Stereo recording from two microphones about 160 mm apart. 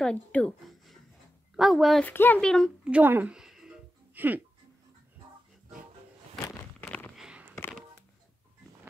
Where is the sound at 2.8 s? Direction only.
10° right (ahead or behind).